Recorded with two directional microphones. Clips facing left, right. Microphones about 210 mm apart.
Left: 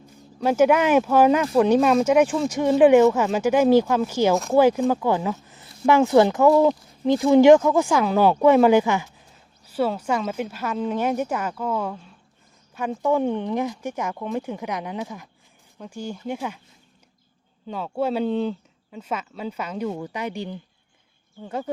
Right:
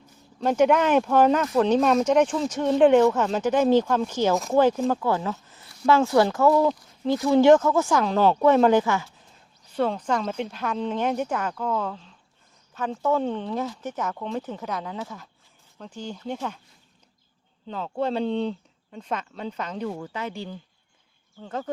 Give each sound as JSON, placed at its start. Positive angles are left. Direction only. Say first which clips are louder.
{"t": 0.0, "sound": "speech", "louder": "left 2 dB", "side_deg": 5}
{"t": 4.4, "sound": "speech", "louder": "left 2 dB", "side_deg": 0}
{"t": 17.7, "sound": "speech", "louder": "left 2 dB", "side_deg": 10}